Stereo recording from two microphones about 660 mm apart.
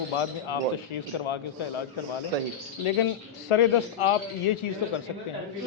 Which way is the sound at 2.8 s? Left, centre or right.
Left.